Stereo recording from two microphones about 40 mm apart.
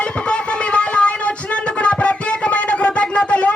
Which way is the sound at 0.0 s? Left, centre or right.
Left.